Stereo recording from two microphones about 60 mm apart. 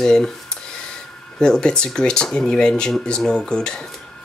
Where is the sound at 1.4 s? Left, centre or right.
Centre.